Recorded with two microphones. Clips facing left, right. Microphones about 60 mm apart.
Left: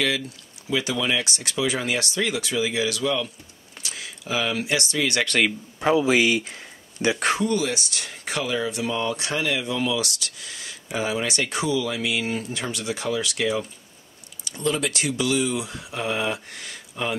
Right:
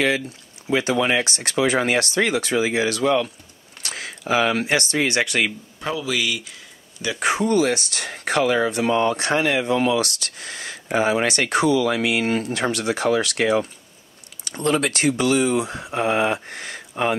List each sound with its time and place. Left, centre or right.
0.7 s speech: right
3.8 s speech: right
5.2 s speech: centre
5.8 s speech: left
7.3 s speech: right